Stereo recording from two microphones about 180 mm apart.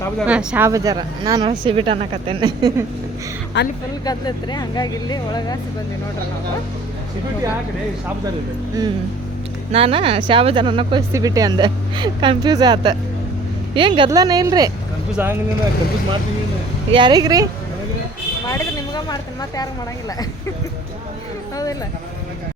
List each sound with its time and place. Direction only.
0.3 s speech: 10° right (ahead or behind)
3.6 s a woman's voice: 80° left
4.0 s speech: 20° left (ahead or behind)
9.7 s speech: 30° right (ahead or behind); by 15.4 s 10° right (ahead or behind)
16.9 s speech: 25° right (ahead or behind)
18.4 s speech: 20° left (ahead or behind)
21.5 s a sound: 20° left (ahead or behind)